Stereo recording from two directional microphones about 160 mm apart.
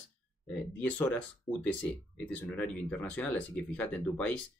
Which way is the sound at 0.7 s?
10° left (ahead or behind).